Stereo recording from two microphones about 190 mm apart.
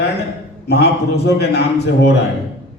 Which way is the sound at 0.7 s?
60° left (ahead or behind).